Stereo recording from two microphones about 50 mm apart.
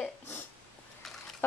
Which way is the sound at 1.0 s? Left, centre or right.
Centre.